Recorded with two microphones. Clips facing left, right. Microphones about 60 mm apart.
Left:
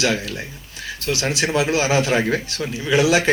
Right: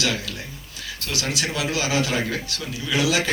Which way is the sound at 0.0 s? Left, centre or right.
Left.